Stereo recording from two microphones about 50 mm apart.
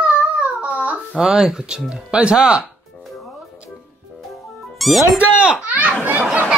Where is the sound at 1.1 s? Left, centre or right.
Centre.